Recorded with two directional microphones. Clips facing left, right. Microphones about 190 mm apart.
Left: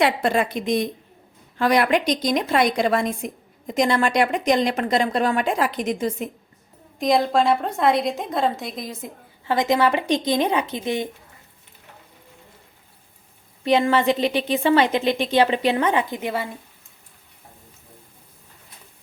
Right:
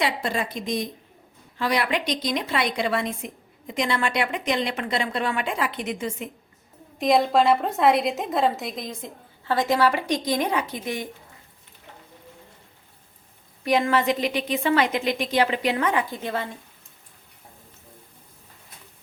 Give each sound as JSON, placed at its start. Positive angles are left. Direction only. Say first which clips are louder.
{"t": 0.0, "sound": "a woman's voice", "louder": "left 6 dB", "side_deg": 60}
{"t": 1.5, "sound": "a woman's voice", "louder": "left 6 dB", "side_deg": 50}
{"t": 7.0, "sound": "a woman's voice", "louder": "even", "side_deg": 0}
{"t": 13.7, "sound": "a woman's voice", "louder": "left 3 dB", "side_deg": 25}